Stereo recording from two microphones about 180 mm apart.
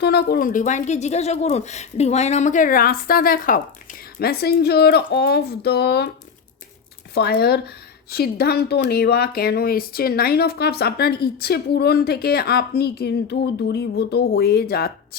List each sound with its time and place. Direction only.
0.0 s speech: 60° left (ahead or behind)
7.1 s speech: 60° left (ahead or behind)